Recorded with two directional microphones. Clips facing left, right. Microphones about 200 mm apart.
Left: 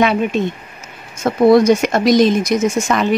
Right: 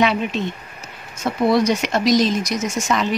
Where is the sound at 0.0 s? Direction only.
50° left (ahead or behind).